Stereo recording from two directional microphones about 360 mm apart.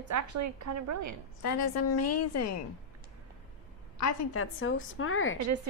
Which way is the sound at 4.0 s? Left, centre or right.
Left.